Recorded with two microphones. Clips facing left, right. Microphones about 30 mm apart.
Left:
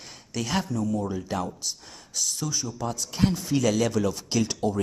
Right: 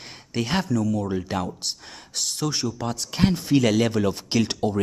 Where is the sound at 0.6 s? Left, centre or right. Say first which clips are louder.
Right 4 dB; right.